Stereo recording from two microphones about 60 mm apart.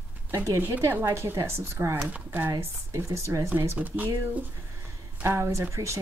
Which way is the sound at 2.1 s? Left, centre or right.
Right.